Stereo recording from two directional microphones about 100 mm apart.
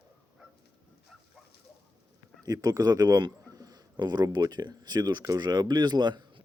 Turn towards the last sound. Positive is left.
turn(degrees=-50)  # may be behind; listen again after turning